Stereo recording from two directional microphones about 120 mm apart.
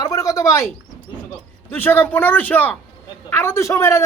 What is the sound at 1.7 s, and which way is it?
A man's voice, 15° left (ahead or behind).